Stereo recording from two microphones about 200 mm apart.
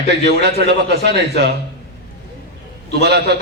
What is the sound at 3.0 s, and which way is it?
Speech, 55° right (ahead or behind).